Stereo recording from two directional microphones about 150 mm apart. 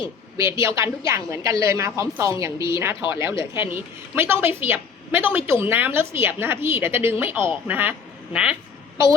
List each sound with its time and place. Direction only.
0.6 s a woman's voice: 20° right (ahead or behind)